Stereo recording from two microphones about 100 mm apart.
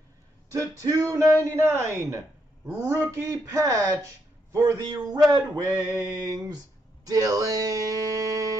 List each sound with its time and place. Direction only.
0.5 s speech: 35° right (ahead or behind)